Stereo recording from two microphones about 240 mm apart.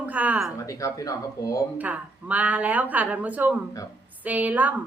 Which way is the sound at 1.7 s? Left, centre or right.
Centre.